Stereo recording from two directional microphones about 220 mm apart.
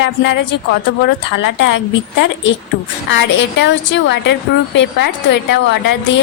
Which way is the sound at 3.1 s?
55° left (ahead or behind).